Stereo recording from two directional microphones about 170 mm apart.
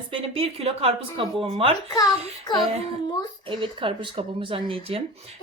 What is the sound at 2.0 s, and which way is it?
Speech, 25° left (ahead or behind).